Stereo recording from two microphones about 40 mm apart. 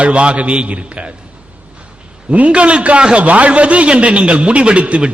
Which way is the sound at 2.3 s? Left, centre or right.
Right.